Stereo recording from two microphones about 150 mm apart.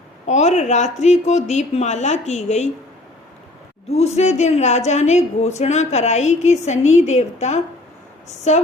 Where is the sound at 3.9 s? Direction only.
45° left (ahead or behind).